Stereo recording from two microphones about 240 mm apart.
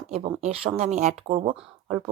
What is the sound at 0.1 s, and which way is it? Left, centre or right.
Speech, right.